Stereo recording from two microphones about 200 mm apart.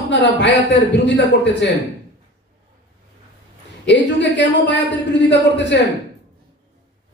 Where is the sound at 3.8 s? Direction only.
60° left (ahead or behind).